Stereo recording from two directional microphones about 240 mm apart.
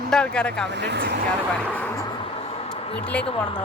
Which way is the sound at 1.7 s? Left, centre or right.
Centre.